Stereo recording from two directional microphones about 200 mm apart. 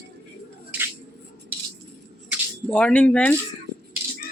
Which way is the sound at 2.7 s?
5° left (ahead or behind).